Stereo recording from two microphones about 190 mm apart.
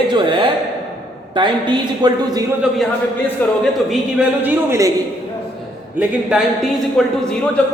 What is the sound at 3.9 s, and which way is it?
Speech, 5° right (ahead or behind).